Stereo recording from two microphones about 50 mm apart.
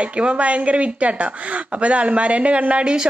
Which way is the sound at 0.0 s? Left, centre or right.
Right.